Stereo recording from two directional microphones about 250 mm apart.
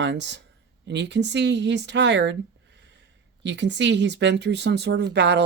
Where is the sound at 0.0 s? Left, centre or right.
Right.